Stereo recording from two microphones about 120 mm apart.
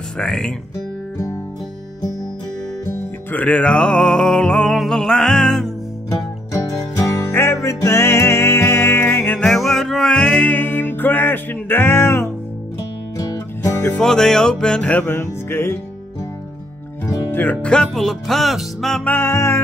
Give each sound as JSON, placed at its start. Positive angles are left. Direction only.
{"t": 0.2, "sound": "music", "side_deg": 5}
{"t": 1.1, "sound": "music", "side_deg": 25}
{"t": 3.3, "sound": "music", "side_deg": 10}
{"t": 7.0, "sound": "music", "side_deg": 25}
{"t": 9.5, "sound": "music", "side_deg": 5}
{"t": 13.3, "sound": "music", "side_deg": 30}
{"t": 13.8, "sound": "music", "side_deg": 5}
{"t": 17.0, "sound": "music", "side_deg": 20}
{"t": 19.0, "sound": "music", "side_deg": 20}